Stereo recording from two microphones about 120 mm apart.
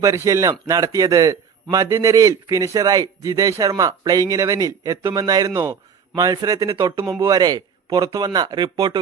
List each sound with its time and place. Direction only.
0.0 s a man's voice: 25° right (ahead or behind)